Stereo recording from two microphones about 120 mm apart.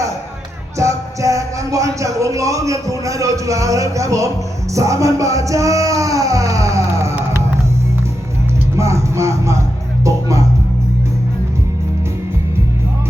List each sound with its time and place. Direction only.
0.8 s music: 25° right (ahead or behind)
8.7 s music: 25° right (ahead or behind)